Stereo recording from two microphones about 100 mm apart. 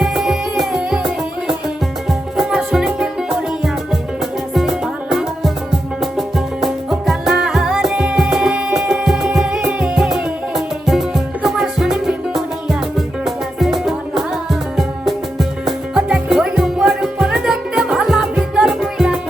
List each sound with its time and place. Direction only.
0.0 s music: 5° right (ahead or behind)
2.0 s music: centre (ahead or behind)